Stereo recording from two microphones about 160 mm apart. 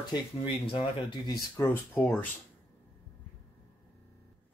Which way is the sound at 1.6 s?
15° left (ahead or behind).